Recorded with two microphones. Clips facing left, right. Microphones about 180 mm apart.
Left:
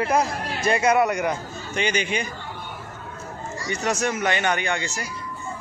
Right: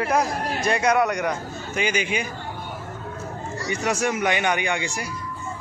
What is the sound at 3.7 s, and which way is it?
Speech, 10° right (ahead or behind).